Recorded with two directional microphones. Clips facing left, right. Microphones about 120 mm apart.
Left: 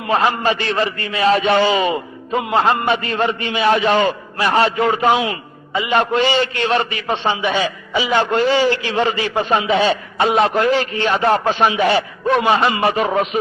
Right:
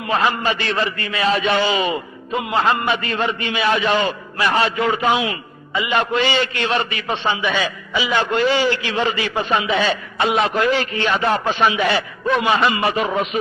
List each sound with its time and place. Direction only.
0.1 s a man's voice: 30° left (ahead or behind)